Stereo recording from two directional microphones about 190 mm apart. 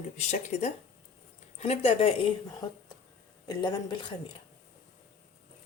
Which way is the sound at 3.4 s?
25° left (ahead or behind).